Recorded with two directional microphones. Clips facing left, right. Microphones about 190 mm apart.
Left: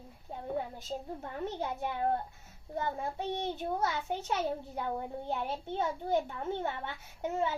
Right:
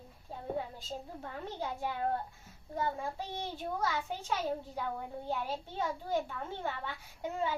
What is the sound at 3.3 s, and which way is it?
A child's voice, 20° left (ahead or behind).